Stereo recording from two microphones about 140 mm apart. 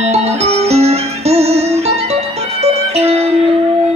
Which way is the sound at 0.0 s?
50° right (ahead or behind).